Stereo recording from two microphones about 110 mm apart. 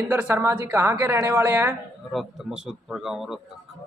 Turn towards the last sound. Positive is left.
turn(degrees=-5)  # may be behind; listen again after turning